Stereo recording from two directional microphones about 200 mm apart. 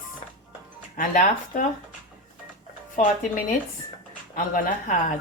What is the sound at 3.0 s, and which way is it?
A woman's voice, 40° left (ahead or behind).